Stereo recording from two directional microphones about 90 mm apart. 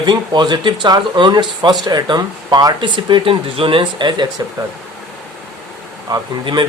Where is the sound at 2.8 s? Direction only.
65° right (ahead or behind).